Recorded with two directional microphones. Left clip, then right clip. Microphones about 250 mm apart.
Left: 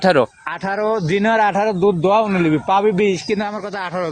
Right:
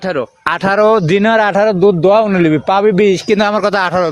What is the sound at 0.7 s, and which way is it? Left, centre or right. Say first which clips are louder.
A man's voice: right 8 dB; right.